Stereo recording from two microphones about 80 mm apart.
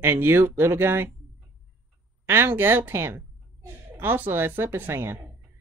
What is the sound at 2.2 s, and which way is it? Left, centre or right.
A woman's voice, right.